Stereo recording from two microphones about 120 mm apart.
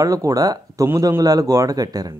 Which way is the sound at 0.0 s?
30° right (ahead or behind).